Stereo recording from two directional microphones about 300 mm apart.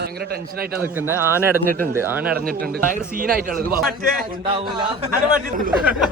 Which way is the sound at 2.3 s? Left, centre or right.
Right.